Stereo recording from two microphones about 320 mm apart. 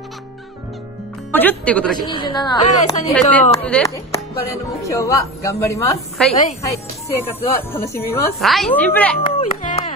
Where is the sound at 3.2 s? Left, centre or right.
Centre.